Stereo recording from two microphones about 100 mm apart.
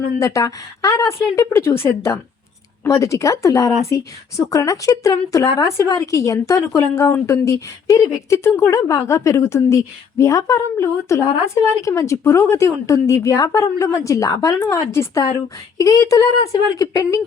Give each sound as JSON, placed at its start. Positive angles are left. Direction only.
{"t": 0.2, "sound": "a woman's voice", "side_deg": 35}